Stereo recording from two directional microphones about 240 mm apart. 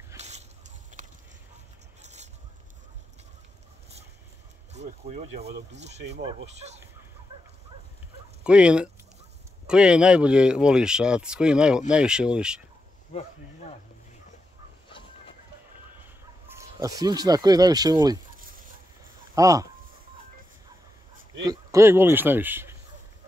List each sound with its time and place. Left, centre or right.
0.2 s a sound: right
4.7 s speech: right
8.5 s speech: centre
14.9 s chicken: left
16.4 s speech: centre
18.4 s a sound: right
19.3 s speech: centre
21.5 s speech: centre